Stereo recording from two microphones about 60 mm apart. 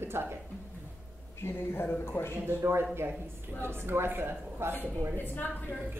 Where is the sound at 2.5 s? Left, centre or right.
Right.